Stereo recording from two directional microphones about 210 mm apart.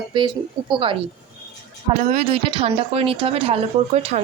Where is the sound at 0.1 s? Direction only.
25° right (ahead or behind).